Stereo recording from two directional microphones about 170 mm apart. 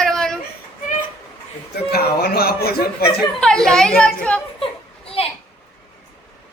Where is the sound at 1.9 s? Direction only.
65° left (ahead or behind).